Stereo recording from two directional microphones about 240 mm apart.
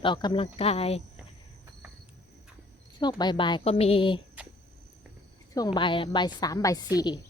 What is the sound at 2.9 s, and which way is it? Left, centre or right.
Speech, centre.